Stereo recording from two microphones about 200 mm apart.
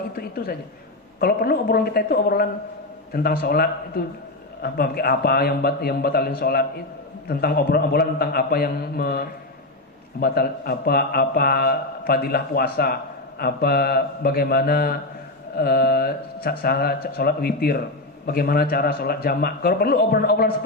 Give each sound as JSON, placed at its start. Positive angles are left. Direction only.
{"t": 0.2, "sound": "a man's voice", "side_deg": 50}